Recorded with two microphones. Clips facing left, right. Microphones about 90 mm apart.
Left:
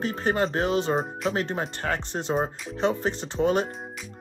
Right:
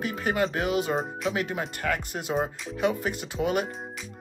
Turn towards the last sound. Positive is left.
turn(degrees=35)  # may be behind; listen again after turning